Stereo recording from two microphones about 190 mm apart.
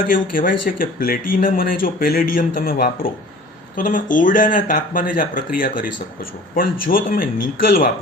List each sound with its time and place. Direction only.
0.0 s speech: 45° left (ahead or behind)